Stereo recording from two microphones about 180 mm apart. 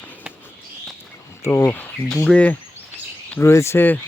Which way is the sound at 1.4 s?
15° left (ahead or behind).